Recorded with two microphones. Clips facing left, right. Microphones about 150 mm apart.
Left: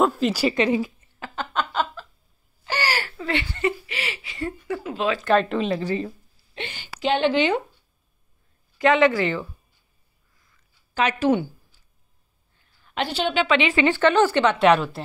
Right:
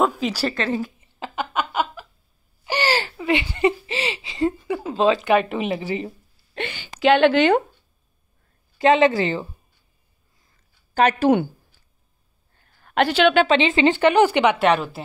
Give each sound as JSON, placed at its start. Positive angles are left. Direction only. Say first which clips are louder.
{"t": 0.0, "sound": "a woman's voice", "louder": "left 1 dB", "side_deg": 0}
{"t": 0.4, "sound": "speech", "louder": "left 3 dB", "side_deg": 10}
{"t": 1.0, "sound": "a sound", "louder": "right 4 dB", "side_deg": -15}
{"t": 4.9, "sound": "speech", "louder": "right 7 dB", "side_deg": -30}
{"t": 5.2, "sound": "a woman's voice", "louder": "right 1 dB", "side_deg": -10}
{"t": 7.0, "sound": "speech", "louder": "right 5 dB", "side_deg": -70}
{"t": 8.7, "sound": "speech", "louder": "right 2 dB", "side_deg": -25}
{"t": 10.4, "sound": "a sound", "louder": "even", "side_deg": -40}
{"t": 12.5, "sound": "a sound", "louder": "right 7 dB", "side_deg": -55}
{"t": 13.5, "sound": "a woman's voice", "louder": "right 3 dB", "side_deg": -25}
{"t": 14.6, "sound": "a woman's voice", "louder": "left 1 dB", "side_deg": 0}